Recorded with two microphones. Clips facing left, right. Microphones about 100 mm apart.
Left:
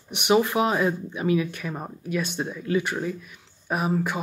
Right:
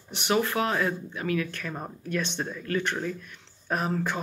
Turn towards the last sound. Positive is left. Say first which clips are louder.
# left 3 dB
turn(degrees=10)  # may be behind; listen again after turning